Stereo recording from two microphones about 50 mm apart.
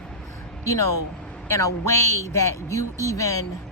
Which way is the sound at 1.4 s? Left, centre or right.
Left.